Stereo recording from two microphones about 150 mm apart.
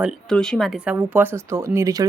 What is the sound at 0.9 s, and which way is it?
Speech, 15° right (ahead or behind).